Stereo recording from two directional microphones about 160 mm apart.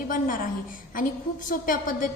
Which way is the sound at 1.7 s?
60° left (ahead or behind).